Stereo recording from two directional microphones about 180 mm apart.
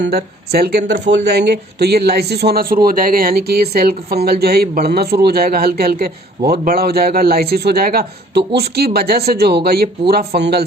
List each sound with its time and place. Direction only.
0.0 s speech: 60° right (ahead or behind)